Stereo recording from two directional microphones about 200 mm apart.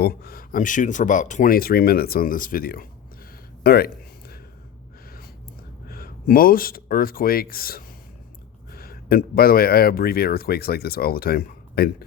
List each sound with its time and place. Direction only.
0.0 s speech: 50° left (ahead or behind)
3.6 s a sound: 50° left (ahead or behind)
5.9 s speech: 50° left (ahead or behind)